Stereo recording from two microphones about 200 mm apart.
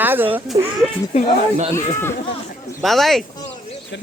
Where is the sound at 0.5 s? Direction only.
25° right (ahead or behind).